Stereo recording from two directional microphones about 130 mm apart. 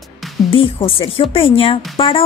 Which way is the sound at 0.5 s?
40° left (ahead or behind).